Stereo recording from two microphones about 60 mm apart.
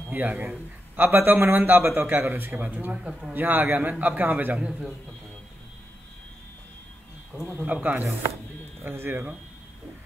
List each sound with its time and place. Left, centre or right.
0.4 s a man's voice: right
2.9 s speech: centre
3.3 s a man's voice: right
4.0 s a man's voice: right
4.6 s speech: centre
7.6 s a man's voice: right